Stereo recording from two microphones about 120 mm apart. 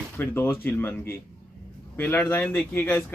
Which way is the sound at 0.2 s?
20° left (ahead or behind).